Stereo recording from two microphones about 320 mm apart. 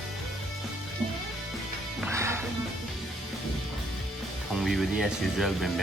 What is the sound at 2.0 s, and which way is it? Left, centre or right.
Music, centre.